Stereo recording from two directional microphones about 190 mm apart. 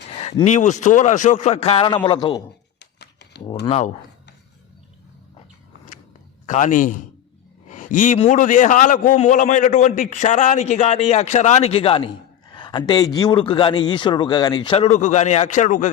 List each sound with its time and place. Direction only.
0.1 s a man's voice: 30° left (ahead or behind)
2.7 s a sound: 60° left (ahead or behind)
3.7 s a man's voice: 35° left (ahead or behind)
6.4 s a man's voice: 40° left (ahead or behind)